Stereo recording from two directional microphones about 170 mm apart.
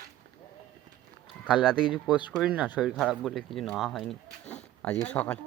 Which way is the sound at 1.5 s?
5° right (ahead or behind).